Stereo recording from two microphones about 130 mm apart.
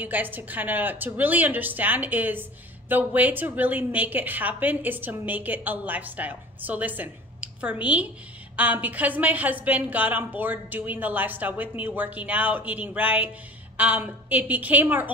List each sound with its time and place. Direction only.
0.0 s a woman's voice: 15° right (ahead or behind)